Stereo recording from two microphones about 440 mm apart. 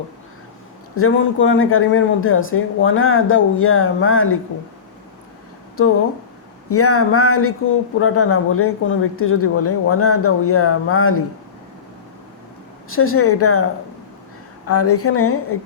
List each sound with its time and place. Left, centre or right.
0.9 s speech: left
6.7 s speech: left
12.9 s speech: left
14.7 s speech: left